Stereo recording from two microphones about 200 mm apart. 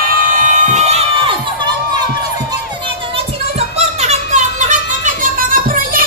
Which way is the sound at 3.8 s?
35° right (ahead or behind).